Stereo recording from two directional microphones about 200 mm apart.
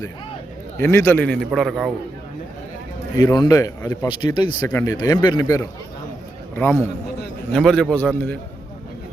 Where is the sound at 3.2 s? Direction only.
20° left (ahead or behind).